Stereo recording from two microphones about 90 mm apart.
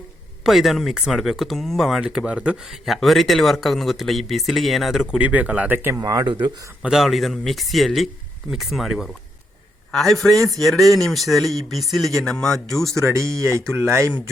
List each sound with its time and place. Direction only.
0.4 s speech: centre (ahead or behind)
5.2 s speech: 15° right (ahead or behind)
6.0 s speech: 40° right (ahead or behind)
6.2 s speech: 60° right (ahead or behind)
6.8 s speech: 5° right (ahead or behind)
13.1 s speech: 35° right (ahead or behind)